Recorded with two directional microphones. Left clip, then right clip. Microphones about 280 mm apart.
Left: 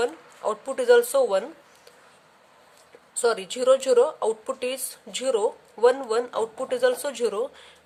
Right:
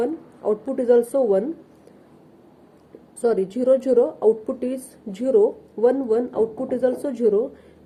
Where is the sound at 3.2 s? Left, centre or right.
Centre.